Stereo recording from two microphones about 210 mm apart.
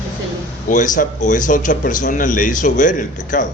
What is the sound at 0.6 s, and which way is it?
Speech, 40° left (ahead or behind).